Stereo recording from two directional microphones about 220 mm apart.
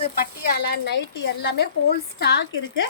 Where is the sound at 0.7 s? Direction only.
50° left (ahead or behind).